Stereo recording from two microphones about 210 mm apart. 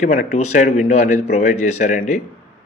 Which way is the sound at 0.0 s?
35° left (ahead or behind).